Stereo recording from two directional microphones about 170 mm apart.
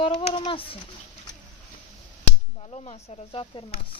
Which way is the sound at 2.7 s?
35° left (ahead or behind).